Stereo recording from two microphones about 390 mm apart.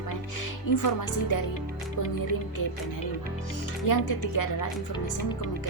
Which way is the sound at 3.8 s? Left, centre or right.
Left.